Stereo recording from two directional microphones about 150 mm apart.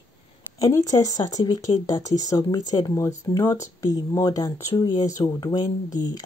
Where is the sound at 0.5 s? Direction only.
25° left (ahead or behind).